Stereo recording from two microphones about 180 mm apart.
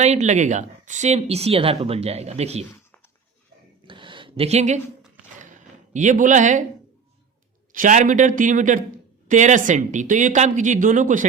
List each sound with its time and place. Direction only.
0.0 s speech: 40° right (ahead or behind)
3.8 s a sound: 25° right (ahead or behind)
5.9 s speech: 45° right (ahead or behind)
7.7 s speech: 45° right (ahead or behind)